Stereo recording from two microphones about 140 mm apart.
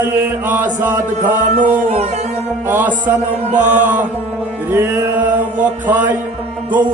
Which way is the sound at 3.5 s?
60° right (ahead or behind).